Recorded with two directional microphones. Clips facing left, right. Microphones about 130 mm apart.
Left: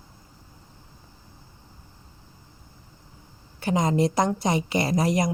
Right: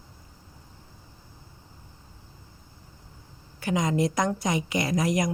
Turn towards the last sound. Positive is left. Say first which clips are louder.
# left 2 dB
turn(degrees=30)  # may be behind; listen again after turning